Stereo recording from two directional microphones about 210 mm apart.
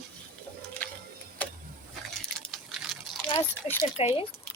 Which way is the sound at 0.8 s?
10° left (ahead or behind).